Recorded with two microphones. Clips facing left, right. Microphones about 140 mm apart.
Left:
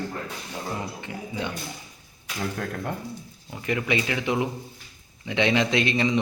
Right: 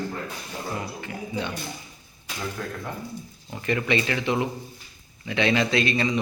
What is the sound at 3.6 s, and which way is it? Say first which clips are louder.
A man's voice: right 1 dB; 10° left (ahead or behind).